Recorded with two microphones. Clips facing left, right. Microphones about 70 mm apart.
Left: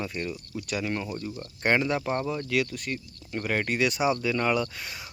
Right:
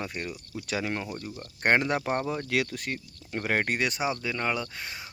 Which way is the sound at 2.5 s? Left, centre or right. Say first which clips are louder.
Left 1 dB; right.